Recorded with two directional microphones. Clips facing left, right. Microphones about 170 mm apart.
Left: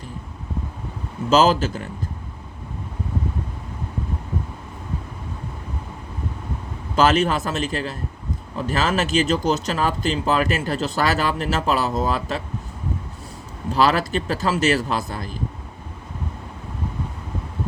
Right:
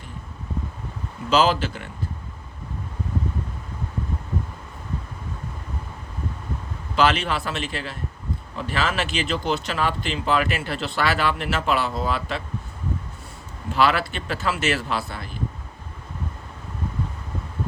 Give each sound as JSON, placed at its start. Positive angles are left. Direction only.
{"t": 1.3, "sound": "speech", "side_deg": 40}
{"t": 6.9, "sound": "speech", "side_deg": 40}
{"t": 13.7, "sound": "speech", "side_deg": 40}